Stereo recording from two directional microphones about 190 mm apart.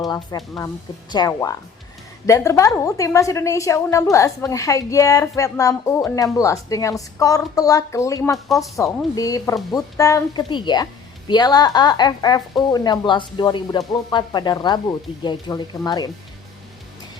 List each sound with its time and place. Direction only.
0.1 s a woman's voice: 20° left (ahead or behind)